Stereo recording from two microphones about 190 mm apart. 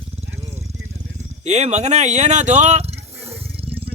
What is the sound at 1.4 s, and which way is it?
Speech, 35° right (ahead or behind).